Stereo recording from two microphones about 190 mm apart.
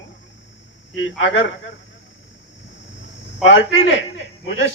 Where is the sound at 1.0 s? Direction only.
75° left (ahead or behind).